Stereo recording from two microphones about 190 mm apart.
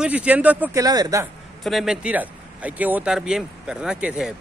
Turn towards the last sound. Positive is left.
turn(degrees=-5)  # may be behind; listen again after turning